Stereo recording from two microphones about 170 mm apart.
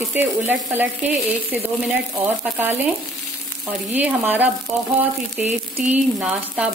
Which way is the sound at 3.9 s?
10° right (ahead or behind).